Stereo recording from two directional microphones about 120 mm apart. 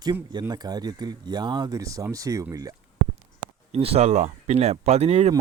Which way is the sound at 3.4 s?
55° right (ahead or behind).